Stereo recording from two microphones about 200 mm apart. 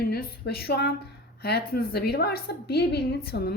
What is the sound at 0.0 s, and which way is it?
A woman's voice, 50° left (ahead or behind).